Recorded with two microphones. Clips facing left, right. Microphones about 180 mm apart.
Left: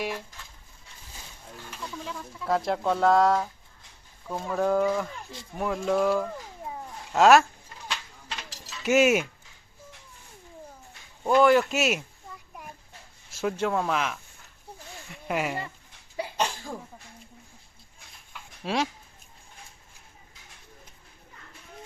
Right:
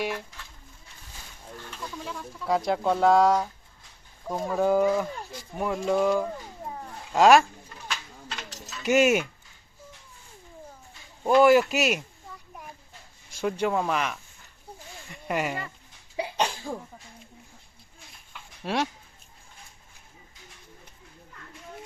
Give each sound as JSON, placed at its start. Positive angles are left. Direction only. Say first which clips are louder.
{"t": 0.0, "sound": "speech", "louder": "right 2 dB", "side_deg": 0}
{"t": 1.8, "sound": "speech", "louder": "even", "side_deg": 0}
{"t": 4.5, "sound": "speech", "louder": "right 2 dB", "side_deg": -5}
{"t": 6.7, "sound": "cat", "louder": "right 1 dB", "side_deg": 0}
{"t": 8.8, "sound": "speech", "louder": "even", "side_deg": 0}
{"t": 11.2, "sound": "speech", "louder": "right 2 dB", "side_deg": -10}
{"t": 13.3, "sound": "speech", "louder": "right 1 dB", "side_deg": 0}
{"t": 16.1, "sound": "cough", "louder": "right 1 dB", "side_deg": -15}
{"t": 18.6, "sound": "speech", "louder": "even", "side_deg": 0}